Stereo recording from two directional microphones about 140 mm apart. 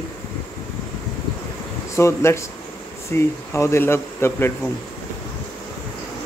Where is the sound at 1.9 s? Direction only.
20° left (ahead or behind).